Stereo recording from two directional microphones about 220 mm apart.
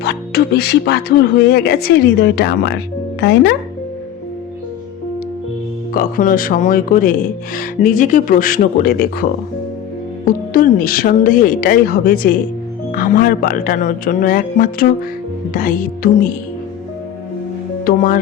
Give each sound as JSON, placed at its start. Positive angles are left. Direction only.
{"t": 0.0, "sound": "speech", "side_deg": 45}
{"t": 5.9, "sound": "speech", "side_deg": 40}
{"t": 10.2, "sound": "speech", "side_deg": 40}
{"t": 17.8, "sound": "speech", "side_deg": 40}